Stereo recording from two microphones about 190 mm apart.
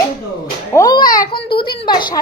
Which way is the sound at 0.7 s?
20° left (ahead or behind).